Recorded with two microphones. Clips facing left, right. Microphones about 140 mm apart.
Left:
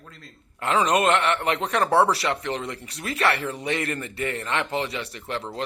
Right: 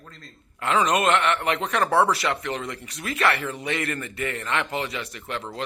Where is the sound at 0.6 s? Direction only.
35° left (ahead or behind).